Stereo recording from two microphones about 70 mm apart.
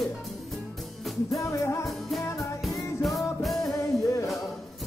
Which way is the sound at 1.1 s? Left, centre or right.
Centre.